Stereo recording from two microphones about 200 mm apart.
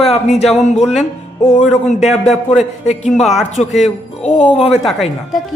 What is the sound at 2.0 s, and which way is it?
A man's voice, 35° left (ahead or behind).